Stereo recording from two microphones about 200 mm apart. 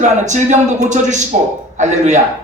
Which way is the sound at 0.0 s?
35° right (ahead or behind).